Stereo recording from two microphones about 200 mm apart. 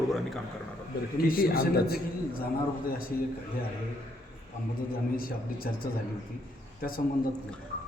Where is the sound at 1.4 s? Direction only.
45° left (ahead or behind).